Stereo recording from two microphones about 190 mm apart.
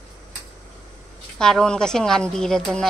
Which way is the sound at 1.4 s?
5° left (ahead or behind).